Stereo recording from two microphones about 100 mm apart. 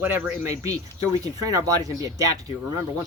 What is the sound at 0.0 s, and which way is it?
Speech, 20° right (ahead or behind).